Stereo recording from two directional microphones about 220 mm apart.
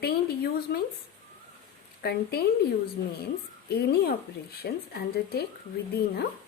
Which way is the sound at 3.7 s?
45° left (ahead or behind).